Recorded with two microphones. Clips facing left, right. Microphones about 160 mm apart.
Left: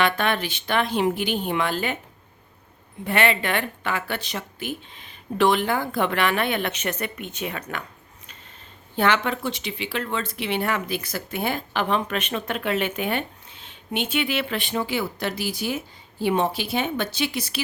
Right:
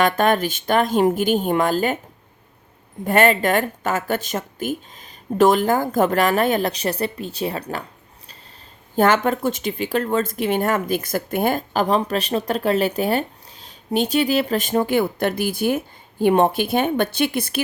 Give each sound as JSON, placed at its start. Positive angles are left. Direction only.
{"t": 0.0, "sound": "speech", "side_deg": -45}
{"t": 3.0, "sound": "speech", "side_deg": -45}
{"t": 9.0, "sound": "speech", "side_deg": -45}